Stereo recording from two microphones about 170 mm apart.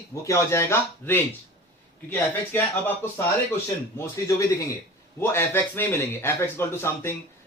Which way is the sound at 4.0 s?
20° left (ahead or behind).